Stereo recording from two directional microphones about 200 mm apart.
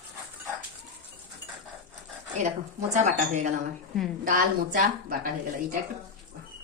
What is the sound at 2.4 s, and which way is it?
A woman's voice, 40° right (ahead or behind).